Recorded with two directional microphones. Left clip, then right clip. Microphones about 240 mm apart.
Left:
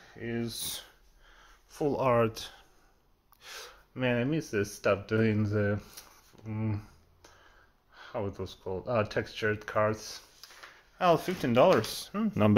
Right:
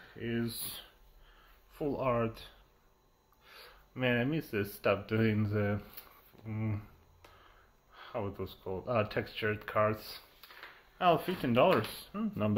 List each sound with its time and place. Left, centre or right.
0.1 s speech: centre
1.7 s speech: left
3.9 s speech: centre
7.9 s speech: centre